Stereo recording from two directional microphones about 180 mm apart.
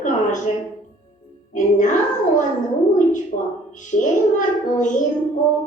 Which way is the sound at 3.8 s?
45° left (ahead or behind).